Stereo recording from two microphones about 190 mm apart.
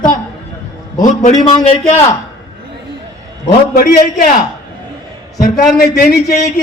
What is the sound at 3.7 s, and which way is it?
Speech, 45° left (ahead or behind).